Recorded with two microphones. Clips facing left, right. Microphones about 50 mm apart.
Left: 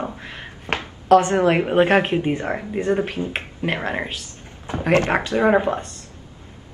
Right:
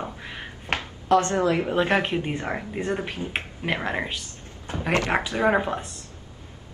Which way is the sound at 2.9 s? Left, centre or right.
Left.